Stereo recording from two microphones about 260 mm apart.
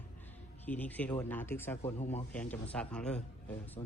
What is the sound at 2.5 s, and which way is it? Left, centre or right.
Speech, centre.